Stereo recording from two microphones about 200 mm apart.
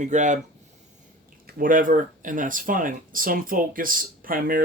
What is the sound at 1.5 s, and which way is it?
Speech, 45° right (ahead or behind).